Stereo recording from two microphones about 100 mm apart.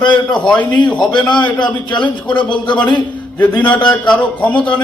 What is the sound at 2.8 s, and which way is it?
A man's voice, 15° left (ahead or behind).